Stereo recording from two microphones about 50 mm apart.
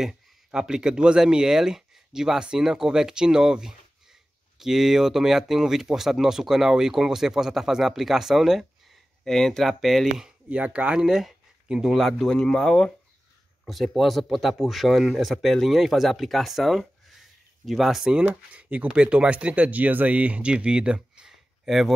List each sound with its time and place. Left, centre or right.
0.5 s speech: centre
9.2 s speech: centre
10.5 s speech: right; by 11.9 s centre
11.9 s speech: centre
12.3 s speech: centre
13.9 s speech: centre
18.5 s speech: right
21.3 s a sound: centre